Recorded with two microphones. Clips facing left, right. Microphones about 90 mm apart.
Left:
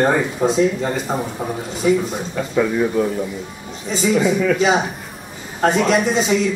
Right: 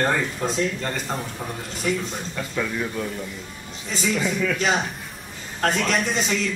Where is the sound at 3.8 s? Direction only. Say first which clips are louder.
Left 8 dB; 5° left (ahead or behind).